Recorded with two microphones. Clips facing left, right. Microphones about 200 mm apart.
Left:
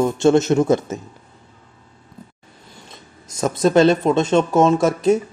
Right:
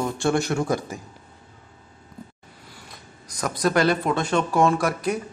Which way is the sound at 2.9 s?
25° left (ahead or behind).